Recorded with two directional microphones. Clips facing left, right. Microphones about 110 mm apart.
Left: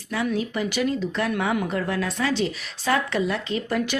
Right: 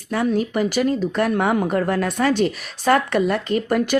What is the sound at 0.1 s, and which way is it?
Speech, 45° right (ahead or behind).